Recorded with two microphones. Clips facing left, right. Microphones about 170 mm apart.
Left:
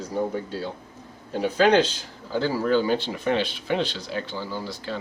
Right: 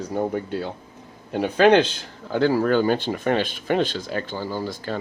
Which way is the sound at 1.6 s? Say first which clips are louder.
Right 3 dB; 60° right (ahead or behind).